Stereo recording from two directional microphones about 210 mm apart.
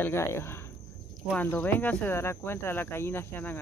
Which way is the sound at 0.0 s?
10° left (ahead or behind).